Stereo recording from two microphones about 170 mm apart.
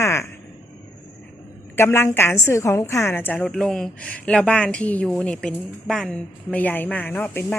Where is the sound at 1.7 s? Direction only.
15° left (ahead or behind).